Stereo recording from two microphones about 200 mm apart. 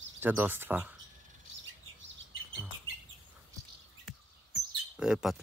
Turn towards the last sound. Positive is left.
turn(degrees=-5)  # may be behind; listen again after turning